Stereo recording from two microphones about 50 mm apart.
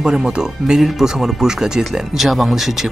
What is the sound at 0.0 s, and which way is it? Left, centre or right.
Speech, centre.